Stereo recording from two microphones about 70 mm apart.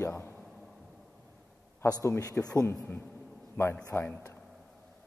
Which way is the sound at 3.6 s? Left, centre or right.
Left.